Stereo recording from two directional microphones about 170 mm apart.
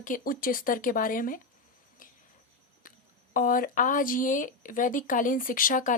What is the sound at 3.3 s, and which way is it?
Speech, 55° left (ahead or behind).